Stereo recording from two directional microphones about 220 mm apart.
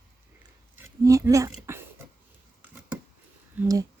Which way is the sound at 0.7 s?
15° right (ahead or behind).